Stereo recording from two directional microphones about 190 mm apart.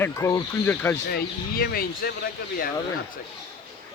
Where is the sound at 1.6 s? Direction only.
50° left (ahead or behind).